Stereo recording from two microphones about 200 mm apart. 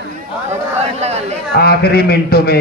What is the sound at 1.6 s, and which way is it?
Speech, 50° left (ahead or behind).